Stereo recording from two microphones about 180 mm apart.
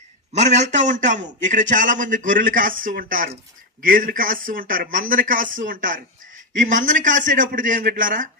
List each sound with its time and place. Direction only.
0.3 s a man's voice: 40° right (ahead or behind)